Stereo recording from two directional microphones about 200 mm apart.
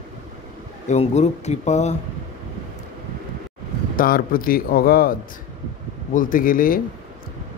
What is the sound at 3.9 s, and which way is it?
Speech, 45° left (ahead or behind).